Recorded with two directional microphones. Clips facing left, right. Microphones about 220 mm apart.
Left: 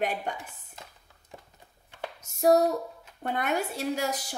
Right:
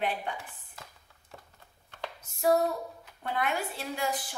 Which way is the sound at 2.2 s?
45° left (ahead or behind).